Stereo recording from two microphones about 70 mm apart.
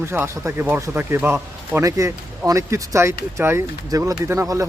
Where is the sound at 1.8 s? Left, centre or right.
Right.